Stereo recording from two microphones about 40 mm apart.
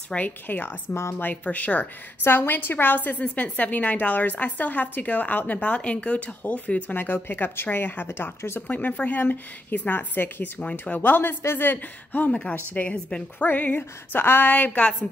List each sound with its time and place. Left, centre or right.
0.1 s a woman's voice: left
0.5 s speech: left
1.1 s speech: left
2.2 s a woman's voice: left
8.6 s a woman's voice: left
10.6 s speech: left
11.0 s speech: left
12.3 s a woman's voice: left
14.1 s speech: left
14.5 s speech: left